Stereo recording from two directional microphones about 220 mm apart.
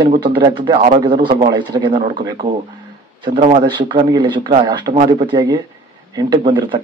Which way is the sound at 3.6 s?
20° right (ahead or behind).